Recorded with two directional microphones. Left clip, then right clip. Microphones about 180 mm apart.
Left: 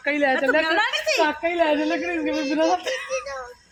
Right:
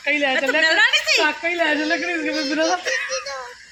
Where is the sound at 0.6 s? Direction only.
55° left (ahead or behind).